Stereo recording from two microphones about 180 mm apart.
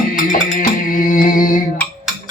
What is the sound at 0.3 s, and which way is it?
Music, 45° left (ahead or behind).